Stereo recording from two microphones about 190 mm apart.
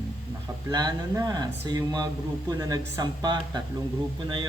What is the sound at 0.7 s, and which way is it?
Speech, 20° right (ahead or behind).